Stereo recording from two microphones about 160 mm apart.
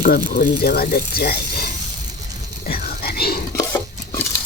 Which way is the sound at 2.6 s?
70° left (ahead or behind).